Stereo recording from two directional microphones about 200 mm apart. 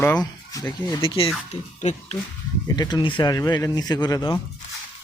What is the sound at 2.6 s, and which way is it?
Speech, 20° left (ahead or behind).